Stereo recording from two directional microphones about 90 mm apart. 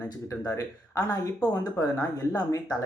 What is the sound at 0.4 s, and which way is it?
Speech, 40° left (ahead or behind).